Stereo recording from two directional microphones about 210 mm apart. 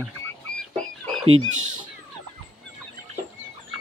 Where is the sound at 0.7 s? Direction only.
5° left (ahead or behind).